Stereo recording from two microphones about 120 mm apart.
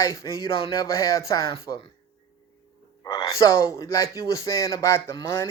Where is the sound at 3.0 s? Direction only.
35° left (ahead or behind).